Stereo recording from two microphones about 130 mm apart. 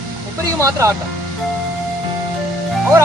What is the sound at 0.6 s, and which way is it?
Speech, 20° right (ahead or behind).